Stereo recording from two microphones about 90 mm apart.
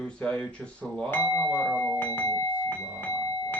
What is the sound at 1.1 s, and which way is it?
Speech, 30° left (ahead or behind).